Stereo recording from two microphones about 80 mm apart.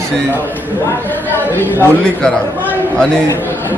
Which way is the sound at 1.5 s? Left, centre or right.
Left.